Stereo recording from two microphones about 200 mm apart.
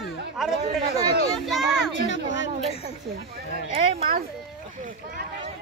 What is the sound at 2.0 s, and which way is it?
Speech, 65° left (ahead or behind).